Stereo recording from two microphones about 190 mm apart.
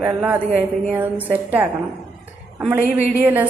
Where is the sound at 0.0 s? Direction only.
5° right (ahead or behind).